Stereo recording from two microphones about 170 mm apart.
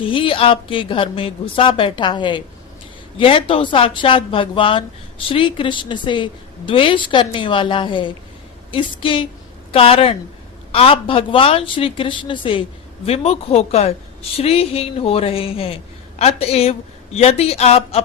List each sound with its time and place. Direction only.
0.0 s a woman's voice: 30° left (ahead or behind)